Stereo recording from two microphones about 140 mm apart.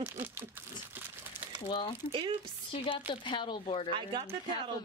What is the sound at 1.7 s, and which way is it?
Speech, 35° left (ahead or behind).